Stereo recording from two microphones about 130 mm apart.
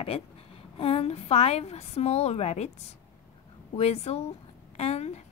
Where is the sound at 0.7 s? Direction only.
50° left (ahead or behind).